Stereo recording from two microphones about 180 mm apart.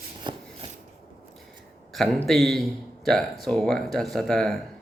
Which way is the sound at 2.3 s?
Centre (ahead or behind).